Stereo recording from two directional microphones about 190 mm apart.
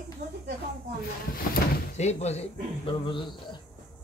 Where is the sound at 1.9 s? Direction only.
35° left (ahead or behind).